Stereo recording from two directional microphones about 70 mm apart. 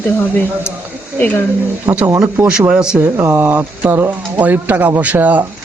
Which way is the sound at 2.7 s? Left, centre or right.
Centre.